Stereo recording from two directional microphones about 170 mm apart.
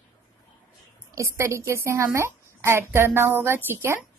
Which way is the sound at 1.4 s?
15° right (ahead or behind).